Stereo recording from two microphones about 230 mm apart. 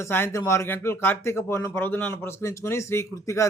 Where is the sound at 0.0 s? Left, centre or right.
Centre.